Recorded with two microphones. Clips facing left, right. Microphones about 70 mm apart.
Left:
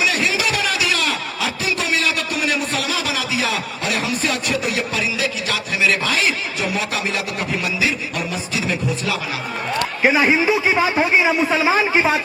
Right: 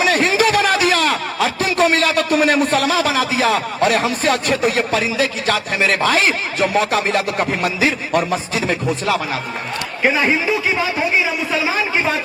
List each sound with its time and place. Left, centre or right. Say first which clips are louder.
0.0 s a man's voice: right 5 dB; right
10.0 s a man's voice: even; centre